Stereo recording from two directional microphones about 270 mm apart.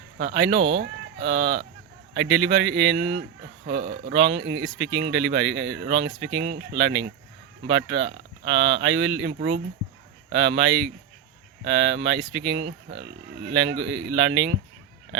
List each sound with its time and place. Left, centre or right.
0.3 s speech: right
1.2 s speech: right
2.1 s speech: right
3.7 s speech: right
4.1 s speech: right